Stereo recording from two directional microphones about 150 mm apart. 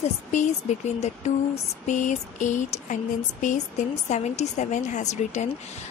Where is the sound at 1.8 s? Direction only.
55° left (ahead or behind).